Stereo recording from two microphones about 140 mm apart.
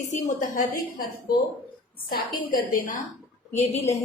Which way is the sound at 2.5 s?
75° left (ahead or behind).